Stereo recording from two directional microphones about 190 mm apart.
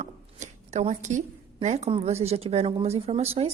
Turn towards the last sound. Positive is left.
turn(degrees=-35)  # may be behind; listen again after turning